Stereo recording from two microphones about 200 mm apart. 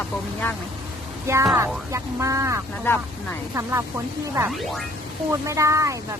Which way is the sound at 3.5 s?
15° right (ahead or behind).